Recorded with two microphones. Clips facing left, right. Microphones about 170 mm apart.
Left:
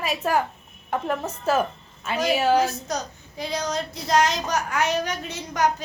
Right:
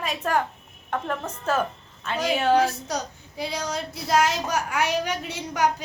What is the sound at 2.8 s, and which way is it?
Speech, 10° right (ahead or behind).